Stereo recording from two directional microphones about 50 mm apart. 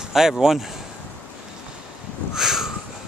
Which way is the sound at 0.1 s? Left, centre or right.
Centre.